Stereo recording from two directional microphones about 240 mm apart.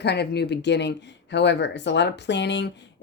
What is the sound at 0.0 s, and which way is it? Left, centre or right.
Speech, left.